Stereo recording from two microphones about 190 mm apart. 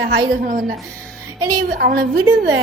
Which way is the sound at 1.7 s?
55° right (ahead or behind).